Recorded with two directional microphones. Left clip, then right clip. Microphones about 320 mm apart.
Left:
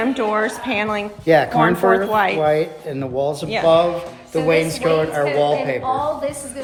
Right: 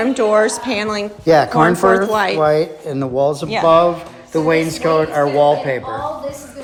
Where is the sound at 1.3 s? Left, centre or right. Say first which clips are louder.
Right 3 dB; right.